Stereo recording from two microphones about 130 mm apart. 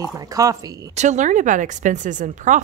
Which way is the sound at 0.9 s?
65° right (ahead or behind).